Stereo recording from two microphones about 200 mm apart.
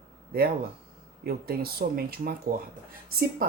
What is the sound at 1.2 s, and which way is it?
Speech, 50° right (ahead or behind).